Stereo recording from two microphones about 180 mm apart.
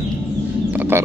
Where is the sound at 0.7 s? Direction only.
10° right (ahead or behind).